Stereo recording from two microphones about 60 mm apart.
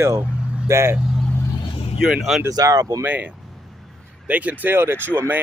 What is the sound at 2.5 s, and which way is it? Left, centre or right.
Speech, right.